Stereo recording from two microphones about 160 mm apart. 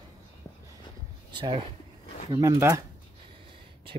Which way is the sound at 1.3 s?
30° right (ahead or behind).